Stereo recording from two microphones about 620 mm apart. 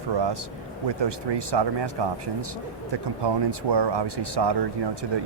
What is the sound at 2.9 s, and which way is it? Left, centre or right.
Speech, right.